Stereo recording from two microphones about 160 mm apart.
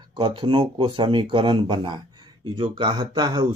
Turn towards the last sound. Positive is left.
turn(degrees=-25)  # may be behind; listen again after turning